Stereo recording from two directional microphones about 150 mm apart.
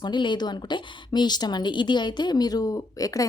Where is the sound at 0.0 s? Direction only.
30° left (ahead or behind).